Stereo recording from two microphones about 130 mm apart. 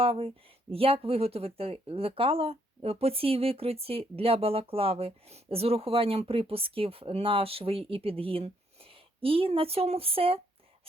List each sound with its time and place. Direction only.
0.0 s speech: 45° right (ahead or behind)